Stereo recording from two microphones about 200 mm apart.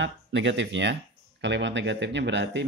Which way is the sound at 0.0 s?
65° right (ahead or behind).